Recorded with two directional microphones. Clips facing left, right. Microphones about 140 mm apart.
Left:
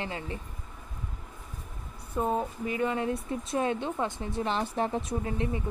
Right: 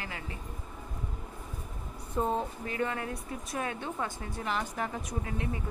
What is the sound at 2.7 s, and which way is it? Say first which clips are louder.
A woman's voice: left 4 dB; 20° left (ahead or behind).